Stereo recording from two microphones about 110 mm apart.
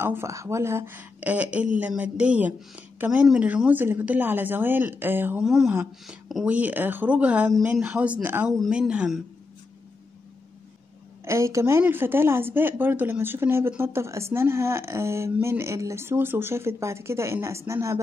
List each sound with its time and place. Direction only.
0.0 s speech: 20° right (ahead or behind)
5.4 s speech: 5° right (ahead or behind)
6.4 s speech: 15° right (ahead or behind)
8.5 s speech: 5° right (ahead or behind)
11.2 s speech: 25° right (ahead or behind)